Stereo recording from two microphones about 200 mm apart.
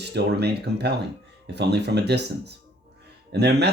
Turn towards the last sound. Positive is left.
turn(degrees=-55)  # may be behind; listen again after turning